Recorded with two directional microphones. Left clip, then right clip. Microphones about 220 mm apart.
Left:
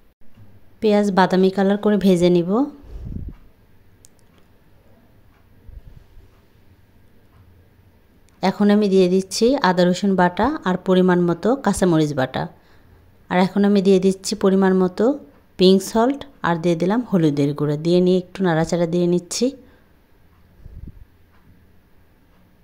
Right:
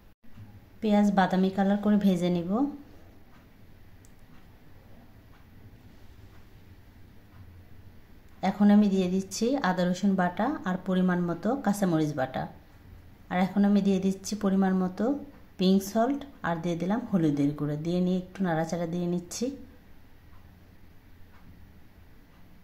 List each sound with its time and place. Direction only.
0.7 s a woman's voice: 40° left (ahead or behind)
8.4 s a woman's voice: 40° left (ahead or behind)